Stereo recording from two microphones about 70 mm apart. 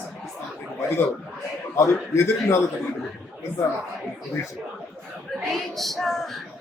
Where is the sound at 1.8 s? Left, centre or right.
Left.